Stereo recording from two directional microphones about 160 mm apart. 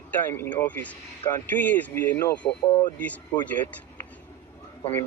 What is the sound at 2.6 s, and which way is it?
Speech, 30° left (ahead or behind).